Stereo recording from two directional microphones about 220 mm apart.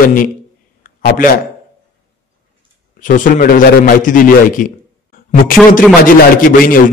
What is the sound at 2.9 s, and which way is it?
A man's voice, 35° left (ahead or behind).